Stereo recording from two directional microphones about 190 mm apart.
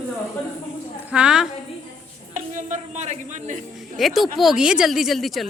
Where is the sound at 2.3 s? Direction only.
40° right (ahead or behind).